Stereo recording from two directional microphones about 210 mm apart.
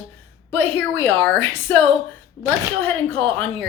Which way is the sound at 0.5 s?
10° left (ahead or behind).